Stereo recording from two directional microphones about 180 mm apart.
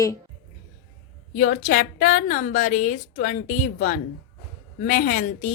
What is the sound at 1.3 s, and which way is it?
A woman's voice, 45° left (ahead or behind).